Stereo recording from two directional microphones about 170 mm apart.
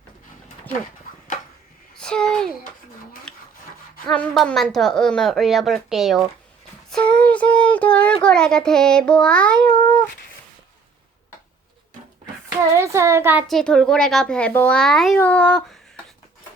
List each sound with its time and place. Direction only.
2.0 s a child's voice: 5° left (ahead or behind)
3.3 s rub: 5° left (ahead or behind)
4.0 s a child's voice: 5° left (ahead or behind)
6.9 s child singing: 5° left (ahead or behind)
8.2 s a child's voice: 5° left (ahead or behind)
12.7 s a child's voice: 15° right (ahead or behind)
13.5 s a child's voice: 5° left (ahead or behind)